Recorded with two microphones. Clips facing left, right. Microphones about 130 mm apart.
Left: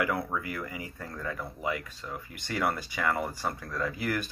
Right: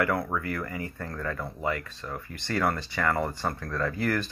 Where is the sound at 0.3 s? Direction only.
15° left (ahead or behind).